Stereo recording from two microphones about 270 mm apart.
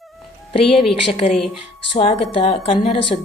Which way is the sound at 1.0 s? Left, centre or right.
Left.